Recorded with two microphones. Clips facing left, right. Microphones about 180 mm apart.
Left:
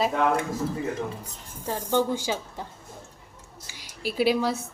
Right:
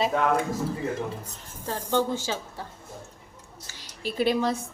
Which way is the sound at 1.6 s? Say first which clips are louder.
Left 1 dB; 15° left (ahead or behind).